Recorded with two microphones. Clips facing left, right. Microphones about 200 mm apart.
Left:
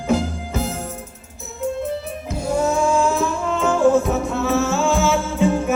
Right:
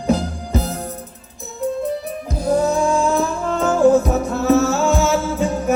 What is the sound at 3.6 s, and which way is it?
Music, 40° right (ahead or behind).